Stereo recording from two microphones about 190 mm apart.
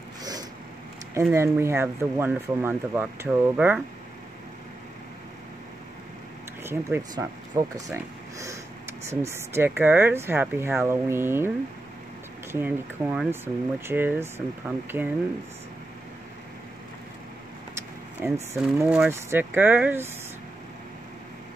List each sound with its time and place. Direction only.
0.2 s a sound: 20° right (ahead or behind)
1.3 s speech: 15° right (ahead or behind)
6.6 s speech: 10° right (ahead or behind)
12.5 s speech: 10° right (ahead or behind)
17.7 s vehicle: 15° right (ahead or behind)
18.9 s speech: 5° right (ahead or behind)